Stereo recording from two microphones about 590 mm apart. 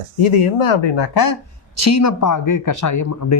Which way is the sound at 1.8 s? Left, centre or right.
Left.